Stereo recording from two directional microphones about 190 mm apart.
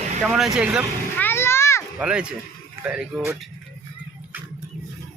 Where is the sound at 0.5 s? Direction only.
5° right (ahead or behind).